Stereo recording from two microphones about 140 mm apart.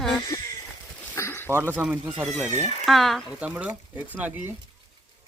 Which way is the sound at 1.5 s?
20° right (ahead or behind).